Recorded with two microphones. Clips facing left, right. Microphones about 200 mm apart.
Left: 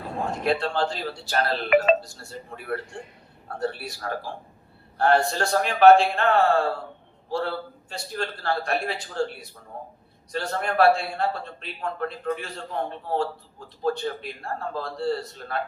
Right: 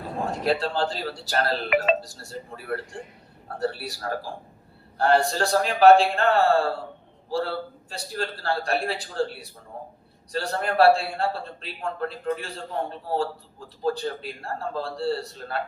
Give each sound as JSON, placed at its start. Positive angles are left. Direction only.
{"t": 0.3, "sound": "a man's voice", "side_deg": -35}